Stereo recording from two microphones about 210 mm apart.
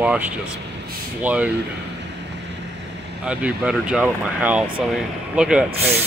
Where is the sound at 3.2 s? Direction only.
5° right (ahead or behind).